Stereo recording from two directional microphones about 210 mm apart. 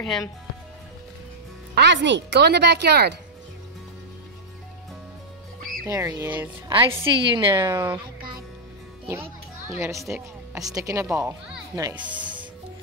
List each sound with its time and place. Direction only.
1.8 s speech: 55° right (ahead or behind)
5.9 s speech: 15° right (ahead or behind)
9.0 s children playing: 10° right (ahead or behind)
10.0 s a woman's voice: 5° right (ahead or behind)